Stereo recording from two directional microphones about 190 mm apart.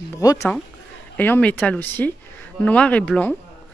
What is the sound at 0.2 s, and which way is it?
Speech, 20° left (ahead or behind).